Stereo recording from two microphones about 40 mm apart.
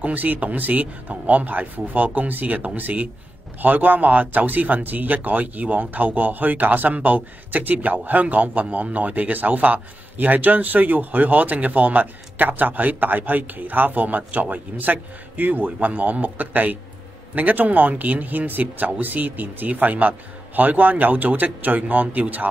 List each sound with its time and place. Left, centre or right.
0.0 s speech: right